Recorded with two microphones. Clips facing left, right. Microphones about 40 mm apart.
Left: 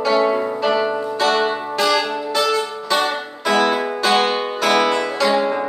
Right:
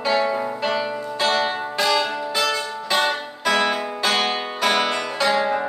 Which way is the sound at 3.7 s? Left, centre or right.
Centre.